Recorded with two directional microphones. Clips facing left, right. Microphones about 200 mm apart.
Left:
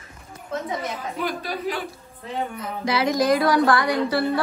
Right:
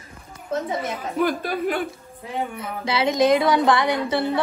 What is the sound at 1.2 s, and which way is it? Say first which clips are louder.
Speech: right 6 dB; 50° right (ahead or behind).